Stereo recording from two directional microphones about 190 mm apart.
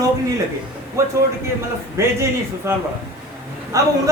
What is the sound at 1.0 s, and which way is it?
A man's voice, 15° right (ahead or behind).